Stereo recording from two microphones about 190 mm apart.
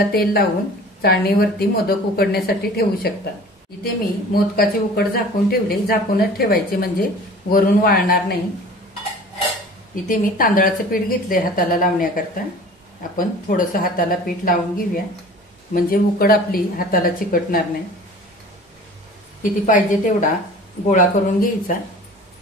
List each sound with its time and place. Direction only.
0.1 s speech: 55° left (ahead or behind)
10.0 s speech: 45° left (ahead or behind)
13.1 s speech: 45° left (ahead or behind)
19.6 s speech: 40° left (ahead or behind)